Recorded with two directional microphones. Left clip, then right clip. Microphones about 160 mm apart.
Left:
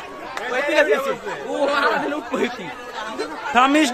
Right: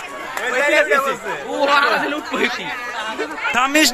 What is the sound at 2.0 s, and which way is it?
Speech, 55° left (ahead or behind).